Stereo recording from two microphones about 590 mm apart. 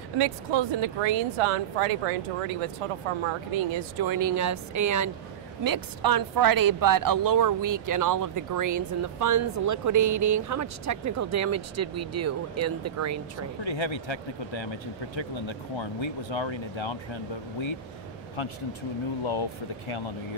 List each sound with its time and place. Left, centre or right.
0.2 s speech: right
3.3 s a woman's voice: right
13.7 s speech: left